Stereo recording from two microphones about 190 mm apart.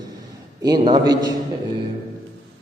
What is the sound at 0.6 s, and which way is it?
Speech, 20° right (ahead or behind).